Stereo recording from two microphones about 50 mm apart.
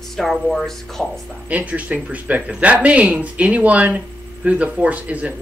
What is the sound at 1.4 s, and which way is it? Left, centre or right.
Speech, right.